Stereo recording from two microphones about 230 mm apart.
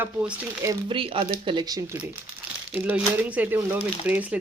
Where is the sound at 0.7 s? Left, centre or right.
Right.